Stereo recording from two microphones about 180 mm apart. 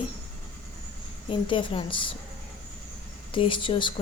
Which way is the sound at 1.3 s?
30° left (ahead or behind).